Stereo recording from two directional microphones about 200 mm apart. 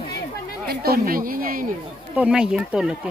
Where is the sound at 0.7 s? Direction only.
50° right (ahead or behind).